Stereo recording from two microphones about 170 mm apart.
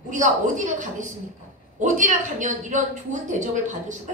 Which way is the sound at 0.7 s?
45° right (ahead or behind).